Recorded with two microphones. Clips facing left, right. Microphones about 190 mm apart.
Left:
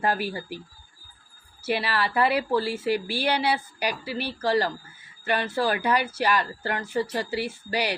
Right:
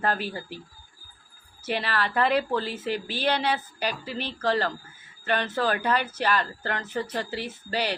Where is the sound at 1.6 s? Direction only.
10° left (ahead or behind).